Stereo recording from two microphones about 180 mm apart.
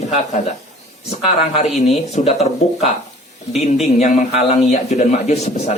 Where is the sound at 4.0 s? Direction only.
40° left (ahead or behind).